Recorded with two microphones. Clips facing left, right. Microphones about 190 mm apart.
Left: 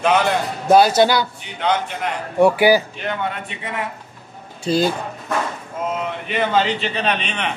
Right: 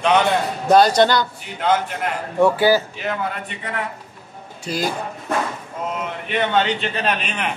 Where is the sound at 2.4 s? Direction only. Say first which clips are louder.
Left 2 dB; 15° left (ahead or behind).